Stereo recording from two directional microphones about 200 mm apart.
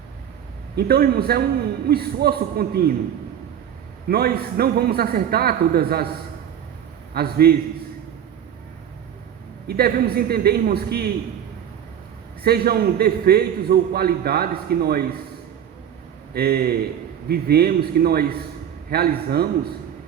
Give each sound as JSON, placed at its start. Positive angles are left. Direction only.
{"t": 0.8, "sound": "a man's voice", "side_deg": -50}
{"t": 4.1, "sound": "a man's voice", "side_deg": -50}
{"t": 7.1, "sound": "a man's voice", "side_deg": -50}
{"t": 9.6, "sound": "a man's voice", "side_deg": -50}
{"t": 12.4, "sound": "a man's voice", "side_deg": -50}
{"t": 16.3, "sound": "a man's voice", "side_deg": -50}